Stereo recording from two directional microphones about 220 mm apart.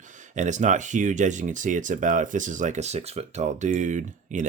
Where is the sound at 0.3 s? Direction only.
35° right (ahead or behind).